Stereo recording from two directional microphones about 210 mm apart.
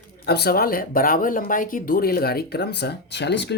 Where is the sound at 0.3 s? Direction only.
50° left (ahead or behind).